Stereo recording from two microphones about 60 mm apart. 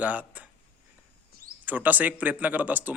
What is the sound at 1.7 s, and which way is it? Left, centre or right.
Speech, right.